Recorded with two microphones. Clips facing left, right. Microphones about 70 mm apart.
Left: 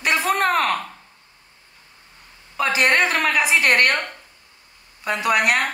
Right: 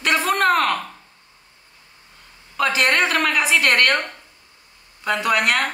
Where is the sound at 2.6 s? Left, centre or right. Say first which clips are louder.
Even; centre.